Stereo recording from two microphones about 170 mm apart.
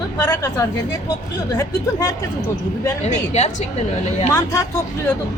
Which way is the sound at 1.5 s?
20° left (ahead or behind).